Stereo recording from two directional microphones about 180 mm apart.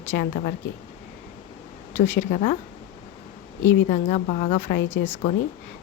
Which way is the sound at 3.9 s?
40° left (ahead or behind).